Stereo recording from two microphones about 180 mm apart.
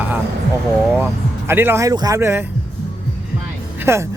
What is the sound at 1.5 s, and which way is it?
Speech, 15° right (ahead or behind).